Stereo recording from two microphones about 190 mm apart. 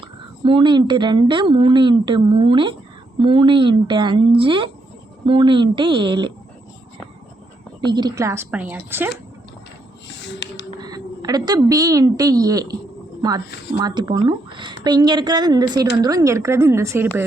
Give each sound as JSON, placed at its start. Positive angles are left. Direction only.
{"t": 0.0, "sound": "speech", "side_deg": -25}
{"t": 7.9, "sound": "a woman's voice", "side_deg": -20}
{"t": 10.1, "sound": "a sound", "side_deg": 70}
{"t": 10.8, "sound": "a woman's voice", "side_deg": -20}
{"t": 13.7, "sound": "a woman's voice", "side_deg": -20}